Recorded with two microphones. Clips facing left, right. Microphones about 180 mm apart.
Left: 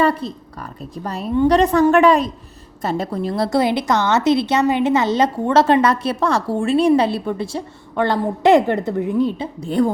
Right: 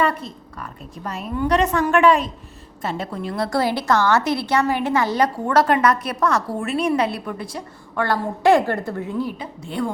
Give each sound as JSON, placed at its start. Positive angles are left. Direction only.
{"t": 0.0, "sound": "a woman's voice", "side_deg": 35}
{"t": 3.5, "sound": "a woman's voice", "side_deg": 20}
{"t": 9.6, "sound": "a woman's voice", "side_deg": 40}